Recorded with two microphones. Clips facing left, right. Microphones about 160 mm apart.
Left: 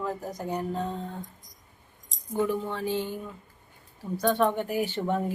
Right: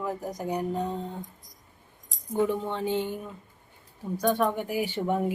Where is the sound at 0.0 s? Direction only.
15° right (ahead or behind).